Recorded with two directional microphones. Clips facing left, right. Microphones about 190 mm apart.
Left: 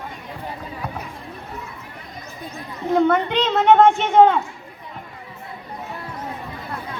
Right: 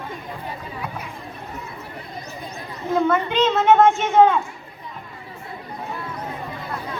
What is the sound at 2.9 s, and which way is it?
A woman's voice, 65° left (ahead or behind).